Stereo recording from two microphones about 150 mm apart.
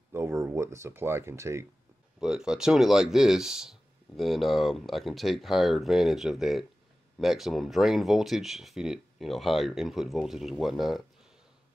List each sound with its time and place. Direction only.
0.1 s speech: 20° right (ahead or behind)
2.1 s speech: 5° right (ahead or behind)